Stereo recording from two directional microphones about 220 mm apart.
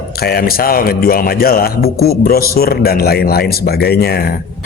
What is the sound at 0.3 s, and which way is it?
A man's voice, 45° left (ahead or behind).